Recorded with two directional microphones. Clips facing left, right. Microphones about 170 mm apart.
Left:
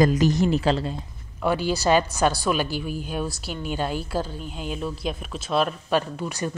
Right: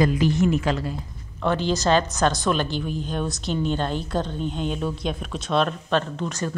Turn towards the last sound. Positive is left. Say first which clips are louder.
# right 1 dB
turn(degrees=10)  # may be behind; listen again after turning